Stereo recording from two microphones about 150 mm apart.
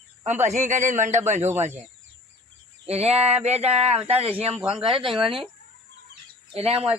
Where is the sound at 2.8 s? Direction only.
45° right (ahead or behind).